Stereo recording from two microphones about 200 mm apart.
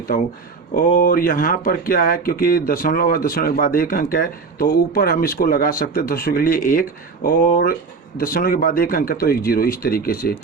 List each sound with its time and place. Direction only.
0.9 s speech: 45° left (ahead or behind)